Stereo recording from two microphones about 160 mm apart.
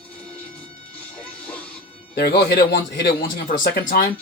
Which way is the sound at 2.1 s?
75° left (ahead or behind).